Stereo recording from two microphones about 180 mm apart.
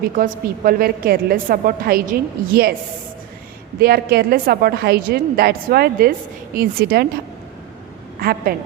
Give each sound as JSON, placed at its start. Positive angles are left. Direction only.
{"t": 0.2, "sound": "a woman's voice", "side_deg": -55}
{"t": 3.8, "sound": "a woman's voice", "side_deg": -60}
{"t": 8.2, "sound": "a woman's voice", "side_deg": -55}